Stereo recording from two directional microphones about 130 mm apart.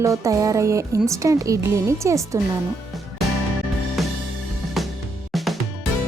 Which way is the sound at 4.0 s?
Centre (ahead or behind).